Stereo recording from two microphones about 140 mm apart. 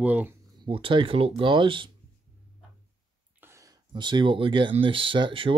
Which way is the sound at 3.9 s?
35° right (ahead or behind).